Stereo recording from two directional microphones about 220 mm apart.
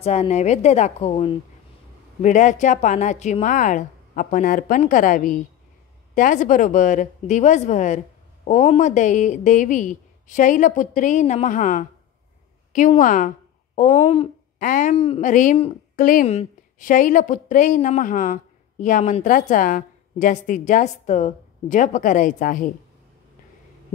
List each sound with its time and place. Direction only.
0.0 s a woman's voice: 30° left (ahead or behind)